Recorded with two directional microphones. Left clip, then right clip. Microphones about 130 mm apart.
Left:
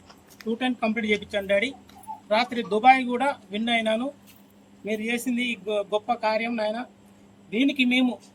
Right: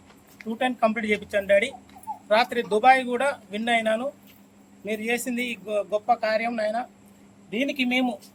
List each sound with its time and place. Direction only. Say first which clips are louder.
0.6 s speech: right 5 dB; 30° right (ahead or behind)